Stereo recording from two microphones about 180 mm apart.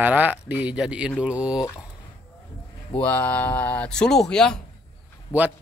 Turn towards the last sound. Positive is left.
turn(degrees=-5)  # may be behind; listen again after turning